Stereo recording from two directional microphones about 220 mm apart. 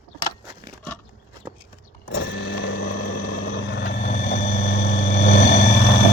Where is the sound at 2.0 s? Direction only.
50° left (ahead or behind).